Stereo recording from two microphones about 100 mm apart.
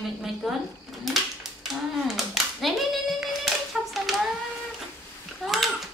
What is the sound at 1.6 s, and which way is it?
Clapping, centre (ahead or behind).